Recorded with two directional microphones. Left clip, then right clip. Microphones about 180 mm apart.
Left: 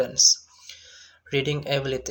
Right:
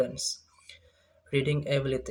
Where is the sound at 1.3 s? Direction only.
20° right (ahead or behind).